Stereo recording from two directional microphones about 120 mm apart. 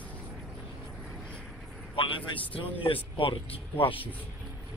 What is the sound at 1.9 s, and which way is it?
Speech, 45° left (ahead or behind).